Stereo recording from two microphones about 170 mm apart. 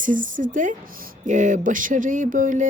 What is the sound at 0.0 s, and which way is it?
Speech, 50° right (ahead or behind).